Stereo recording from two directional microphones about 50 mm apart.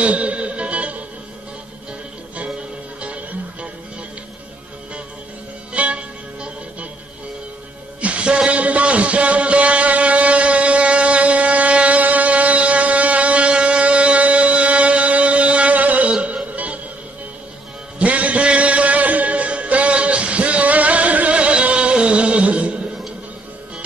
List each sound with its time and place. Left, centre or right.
0.0 s music: right
5.7 s music: right
8.0 s a sound: right
16.1 s music: right
17.9 s music: right